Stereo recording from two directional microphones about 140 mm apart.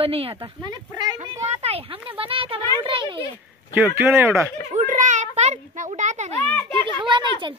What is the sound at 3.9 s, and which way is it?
Speech, 15° right (ahead or behind).